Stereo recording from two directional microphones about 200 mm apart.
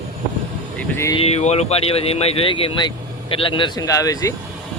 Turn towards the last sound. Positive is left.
turn(degrees=15)  # may be behind; listen again after turning